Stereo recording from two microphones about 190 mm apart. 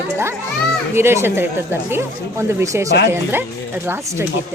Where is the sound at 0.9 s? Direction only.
10° right (ahead or behind).